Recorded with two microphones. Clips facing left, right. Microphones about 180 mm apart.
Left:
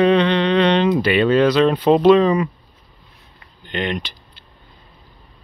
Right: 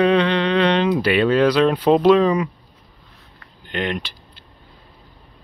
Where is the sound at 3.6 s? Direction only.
5° right (ahead or behind).